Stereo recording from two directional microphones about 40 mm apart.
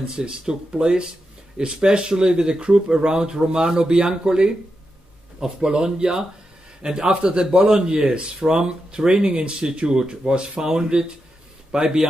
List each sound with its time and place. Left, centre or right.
0.1 s speech: right